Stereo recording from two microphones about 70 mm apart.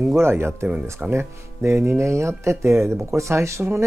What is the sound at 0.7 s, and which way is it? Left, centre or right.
Speech, centre.